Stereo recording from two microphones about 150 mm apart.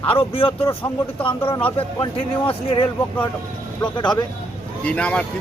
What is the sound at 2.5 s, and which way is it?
Speech, 35° left (ahead or behind).